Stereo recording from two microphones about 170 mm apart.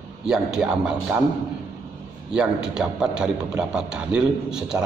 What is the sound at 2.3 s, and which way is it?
A man's voice, 5° right (ahead or behind).